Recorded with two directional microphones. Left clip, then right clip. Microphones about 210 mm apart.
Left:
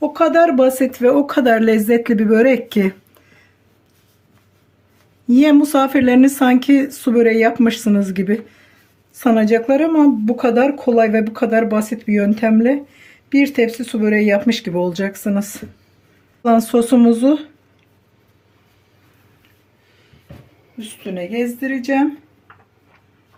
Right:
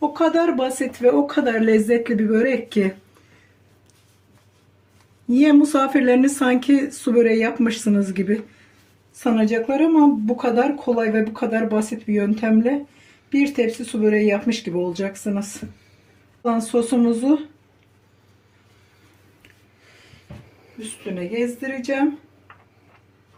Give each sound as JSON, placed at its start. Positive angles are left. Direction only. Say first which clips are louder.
{"t": 0.1, "sound": "speech", "louder": "left 6 dB", "side_deg": 55}
{"t": 5.3, "sound": "speech", "louder": "left 3 dB", "side_deg": 40}